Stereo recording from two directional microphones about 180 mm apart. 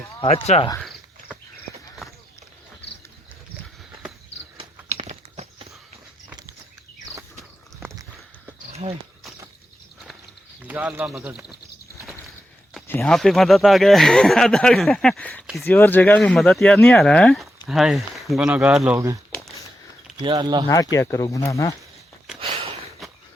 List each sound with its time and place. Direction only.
0.2 s speech: 35° left (ahead or behind)
0.8 s cricket: centre (ahead or behind)
4.5 s a sound: 35° right (ahead or behind)
7.8 s a sound: 15° right (ahead or behind)
10.6 s speech: 10° right (ahead or behind)
13.0 s speech: centre (ahead or behind)
18.9 s speech: 20° right (ahead or behind)
20.9 s speech: 15° left (ahead or behind)
22.4 s a sound: 30° right (ahead or behind)